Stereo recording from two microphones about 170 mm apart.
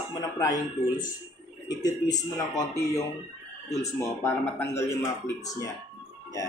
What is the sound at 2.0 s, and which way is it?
Speech, 20° left (ahead or behind).